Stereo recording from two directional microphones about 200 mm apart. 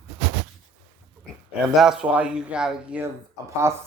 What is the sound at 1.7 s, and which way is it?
Speech, centre (ahead or behind).